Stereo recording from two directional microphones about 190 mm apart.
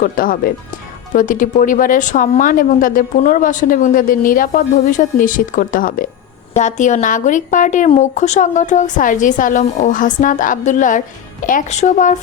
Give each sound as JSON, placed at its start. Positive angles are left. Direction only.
{"t": 0.0, "sound": "a woman's voice", "side_deg": 50}